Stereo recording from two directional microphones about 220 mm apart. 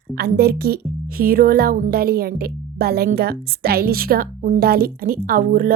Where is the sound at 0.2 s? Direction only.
45° right (ahead or behind).